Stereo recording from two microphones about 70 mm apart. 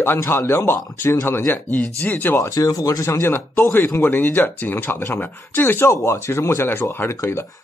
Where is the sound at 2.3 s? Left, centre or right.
Left.